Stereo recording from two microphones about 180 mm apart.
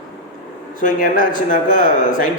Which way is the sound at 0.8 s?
50° left (ahead or behind).